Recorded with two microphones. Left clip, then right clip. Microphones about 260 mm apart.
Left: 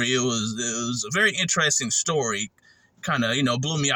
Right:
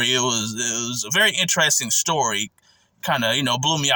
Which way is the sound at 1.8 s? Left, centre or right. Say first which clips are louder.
Right 3 dB; right.